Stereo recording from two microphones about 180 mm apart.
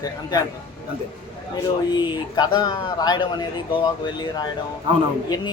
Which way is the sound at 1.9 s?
25° left (ahead or behind).